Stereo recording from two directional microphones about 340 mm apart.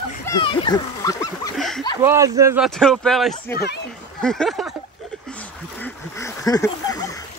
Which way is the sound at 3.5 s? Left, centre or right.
Left.